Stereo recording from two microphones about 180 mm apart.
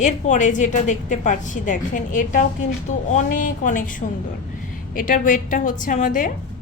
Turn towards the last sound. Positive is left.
turn(degrees=45)  # may be behind; listen again after turning